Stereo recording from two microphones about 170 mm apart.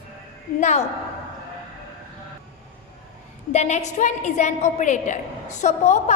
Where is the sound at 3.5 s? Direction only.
40° left (ahead or behind).